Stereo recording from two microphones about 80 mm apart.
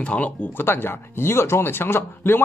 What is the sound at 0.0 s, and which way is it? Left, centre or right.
Speech, centre.